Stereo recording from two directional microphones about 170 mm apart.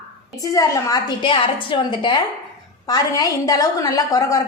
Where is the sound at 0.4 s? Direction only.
20° left (ahead or behind).